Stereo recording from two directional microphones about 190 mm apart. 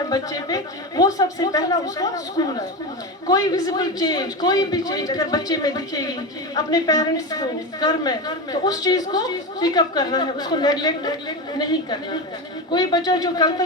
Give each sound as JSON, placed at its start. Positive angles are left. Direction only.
{"t": 0.1, "sound": "a man's voice", "side_deg": 20}